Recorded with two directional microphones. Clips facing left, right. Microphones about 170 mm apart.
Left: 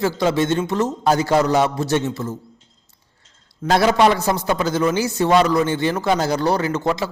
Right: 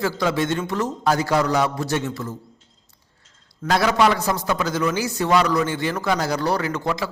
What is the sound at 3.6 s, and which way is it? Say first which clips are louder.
A man's voice: left 3 dB; 25° left (ahead or behind).